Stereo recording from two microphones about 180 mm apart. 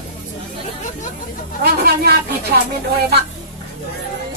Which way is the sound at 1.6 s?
60° right (ahead or behind).